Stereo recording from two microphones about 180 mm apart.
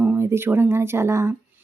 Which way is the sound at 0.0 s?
10° right (ahead or behind).